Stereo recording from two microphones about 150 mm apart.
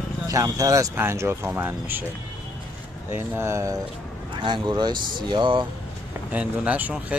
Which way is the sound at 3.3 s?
20° right (ahead or behind).